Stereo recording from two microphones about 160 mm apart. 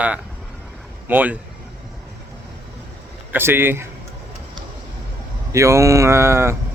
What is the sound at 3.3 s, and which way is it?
Speech, 15° right (ahead or behind).